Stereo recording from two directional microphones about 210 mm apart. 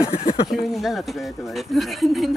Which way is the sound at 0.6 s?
Centre (ahead or behind).